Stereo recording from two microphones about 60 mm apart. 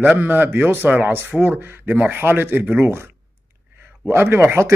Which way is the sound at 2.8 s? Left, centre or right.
Right.